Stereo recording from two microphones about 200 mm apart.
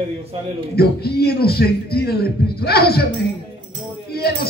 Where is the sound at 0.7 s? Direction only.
50° left (ahead or behind).